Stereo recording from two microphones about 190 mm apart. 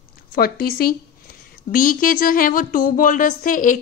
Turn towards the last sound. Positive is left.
turn(degrees=45)  # may be behind; listen again after turning